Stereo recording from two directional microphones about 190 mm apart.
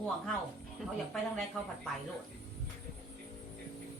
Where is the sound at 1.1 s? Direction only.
Centre (ahead or behind).